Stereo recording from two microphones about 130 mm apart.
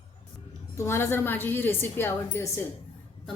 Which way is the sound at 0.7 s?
20° left (ahead or behind).